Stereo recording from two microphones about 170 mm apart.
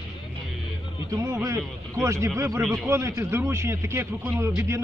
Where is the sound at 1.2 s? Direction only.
20° right (ahead or behind).